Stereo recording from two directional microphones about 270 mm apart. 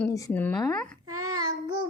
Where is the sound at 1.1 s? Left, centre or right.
Centre.